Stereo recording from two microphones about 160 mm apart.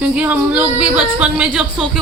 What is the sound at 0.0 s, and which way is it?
A woman's voice, 10° right (ahead or behind).